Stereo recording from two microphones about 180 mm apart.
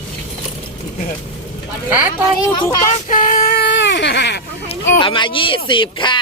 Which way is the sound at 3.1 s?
45° left (ahead or behind).